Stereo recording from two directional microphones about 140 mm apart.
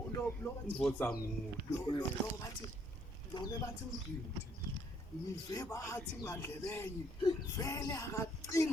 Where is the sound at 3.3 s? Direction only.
30° left (ahead or behind).